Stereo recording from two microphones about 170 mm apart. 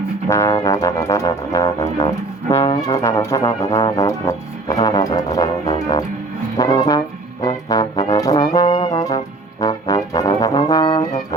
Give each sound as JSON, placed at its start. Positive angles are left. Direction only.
{"t": 0.3, "sound": "music", "side_deg": 15}
{"t": 2.5, "sound": "music", "side_deg": 35}
{"t": 2.8, "sound": "music", "side_deg": 20}
{"t": 6.6, "sound": "music", "side_deg": 20}
{"t": 8.1, "sound": "brass instrument", "side_deg": 20}